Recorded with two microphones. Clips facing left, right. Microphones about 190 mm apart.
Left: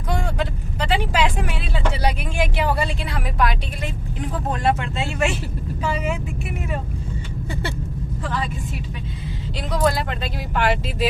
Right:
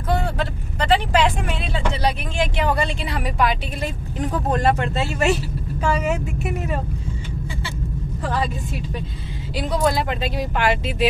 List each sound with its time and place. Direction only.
0.4 s vehicle: 10° left (ahead or behind)
3.8 s speech: 40° right (ahead or behind)
9.6 s speech: centre (ahead or behind)